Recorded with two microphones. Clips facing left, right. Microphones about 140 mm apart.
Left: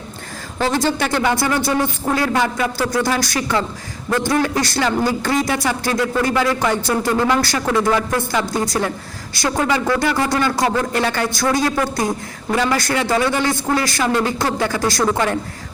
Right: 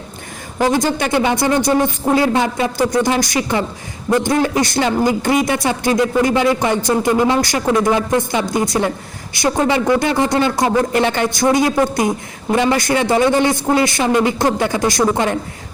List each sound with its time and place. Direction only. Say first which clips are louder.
0.6 s speech: right 3 dB; 15° right (ahead or behind)